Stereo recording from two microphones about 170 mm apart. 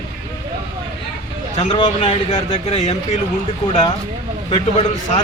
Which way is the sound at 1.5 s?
30° left (ahead or behind).